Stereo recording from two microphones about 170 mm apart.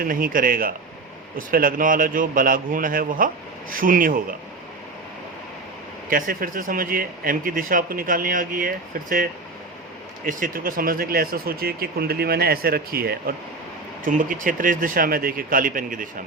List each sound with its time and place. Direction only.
0.0 s speech: 55° right (ahead or behind)
6.1 s speech: 55° right (ahead or behind)
14.0 s a man's voice: 50° right (ahead or behind)